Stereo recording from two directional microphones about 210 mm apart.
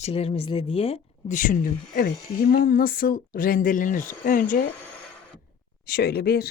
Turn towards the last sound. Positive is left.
turn(degrees=50)  # may be behind; listen again after turning